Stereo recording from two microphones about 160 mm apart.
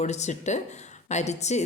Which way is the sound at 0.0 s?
45° left (ahead or behind).